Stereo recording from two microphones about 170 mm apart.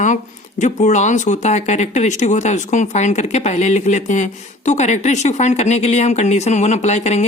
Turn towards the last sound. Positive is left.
turn(degrees=40)  # may be behind; listen again after turning